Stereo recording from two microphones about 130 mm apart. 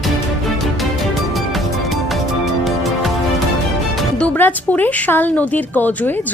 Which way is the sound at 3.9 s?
5° left (ahead or behind).